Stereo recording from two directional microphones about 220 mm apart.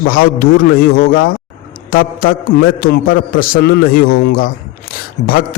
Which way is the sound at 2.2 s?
40° left (ahead or behind).